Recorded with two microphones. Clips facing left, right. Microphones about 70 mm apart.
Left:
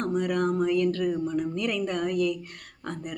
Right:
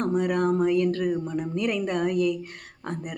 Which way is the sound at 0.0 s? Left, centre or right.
Right.